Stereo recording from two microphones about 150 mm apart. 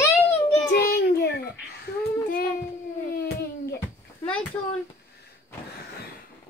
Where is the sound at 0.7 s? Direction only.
90° left.